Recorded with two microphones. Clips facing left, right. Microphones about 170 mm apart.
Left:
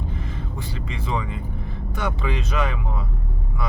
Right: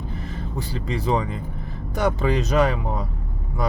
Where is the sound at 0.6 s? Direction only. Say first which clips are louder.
Right 8 dB; 40° right (ahead or behind).